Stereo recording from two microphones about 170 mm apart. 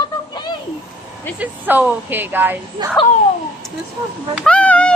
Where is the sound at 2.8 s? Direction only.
25° right (ahead or behind).